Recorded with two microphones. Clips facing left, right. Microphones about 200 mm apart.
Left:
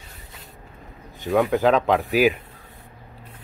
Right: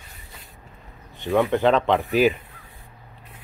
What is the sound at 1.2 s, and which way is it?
Speech, centre (ahead or behind).